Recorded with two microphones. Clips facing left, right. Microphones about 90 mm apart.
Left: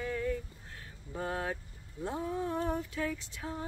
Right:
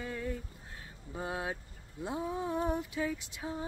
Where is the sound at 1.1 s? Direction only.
10° right (ahead or behind).